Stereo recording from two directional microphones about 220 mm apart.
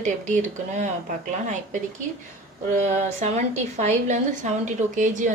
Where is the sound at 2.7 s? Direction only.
30° right (ahead or behind).